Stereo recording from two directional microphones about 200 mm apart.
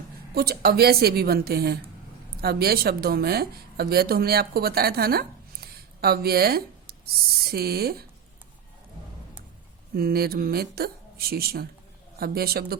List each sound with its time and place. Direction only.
0.3 s speech: 50° right (ahead or behind)
9.9 s speech: 50° right (ahead or behind)